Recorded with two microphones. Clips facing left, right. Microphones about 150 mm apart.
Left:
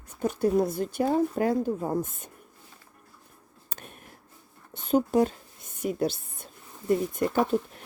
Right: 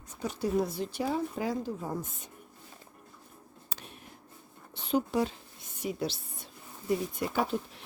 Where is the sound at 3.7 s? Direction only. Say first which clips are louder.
Left 4 dB; 50° left (ahead or behind).